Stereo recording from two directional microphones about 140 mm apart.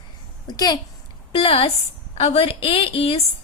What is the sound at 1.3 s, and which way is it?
A woman's voice, 40° left (ahead or behind).